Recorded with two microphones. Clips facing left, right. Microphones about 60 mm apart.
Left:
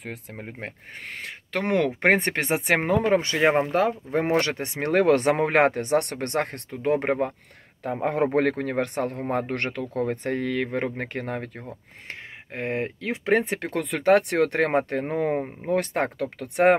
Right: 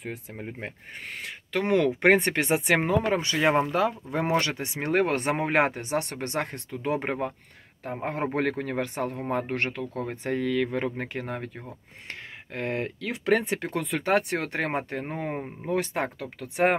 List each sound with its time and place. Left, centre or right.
0.0 s speech: left
0.4 s speech: left
4.8 s speech: left
8.0 s a man's voice: left
8.4 s speech: left
9.5 s speech: left
12.5 s speech: left